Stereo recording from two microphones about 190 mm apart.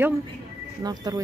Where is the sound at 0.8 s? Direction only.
20° right (ahead or behind).